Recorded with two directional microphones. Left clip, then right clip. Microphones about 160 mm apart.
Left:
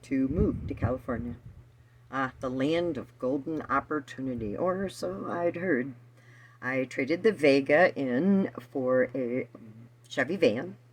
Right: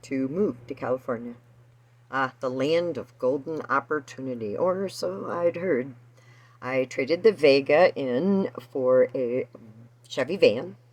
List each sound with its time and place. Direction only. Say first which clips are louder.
0.1 s speech: right 2 dB; centre (ahead or behind); by 8.8 s 15° right (ahead or behind)
8.8 s speech: right 6 dB; 5° right (ahead or behind)